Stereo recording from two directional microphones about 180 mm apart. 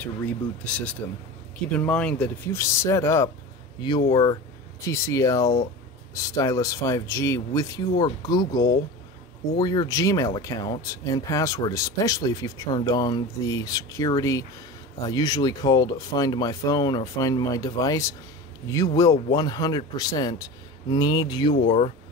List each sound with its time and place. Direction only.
0.0 s speech: 5° left (ahead or behind); by 21.9 s 30° left (ahead or behind)